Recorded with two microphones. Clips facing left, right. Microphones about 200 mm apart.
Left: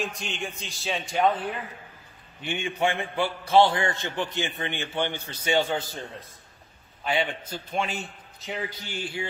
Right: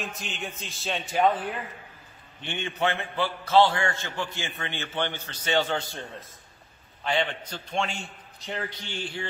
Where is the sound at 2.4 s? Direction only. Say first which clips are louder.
Left 2 dB; 10° left (ahead or behind).